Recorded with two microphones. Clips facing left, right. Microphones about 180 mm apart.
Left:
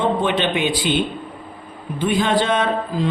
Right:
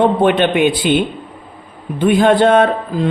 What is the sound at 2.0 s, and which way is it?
A man's voice, 55° right (ahead or behind).